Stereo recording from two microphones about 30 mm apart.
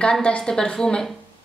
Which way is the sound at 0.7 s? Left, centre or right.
Left.